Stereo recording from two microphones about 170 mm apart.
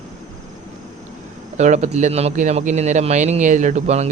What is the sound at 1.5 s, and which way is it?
Speech, 45° right (ahead or behind).